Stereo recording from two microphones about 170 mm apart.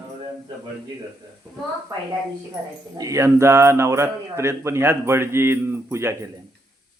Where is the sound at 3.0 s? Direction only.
20° right (ahead or behind).